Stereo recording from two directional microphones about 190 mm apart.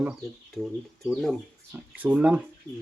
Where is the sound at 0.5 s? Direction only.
Centre (ahead or behind).